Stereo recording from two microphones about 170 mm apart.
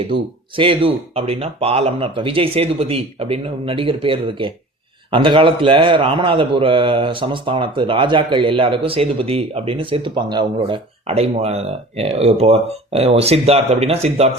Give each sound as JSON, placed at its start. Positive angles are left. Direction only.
{"t": 0.0, "sound": "a man's voice", "side_deg": -30}